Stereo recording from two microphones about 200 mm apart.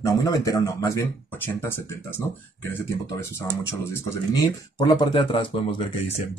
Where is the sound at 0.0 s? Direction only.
15° left (ahead or behind).